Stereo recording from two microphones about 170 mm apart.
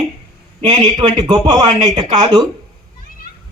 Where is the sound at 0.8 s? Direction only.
25° right (ahead or behind).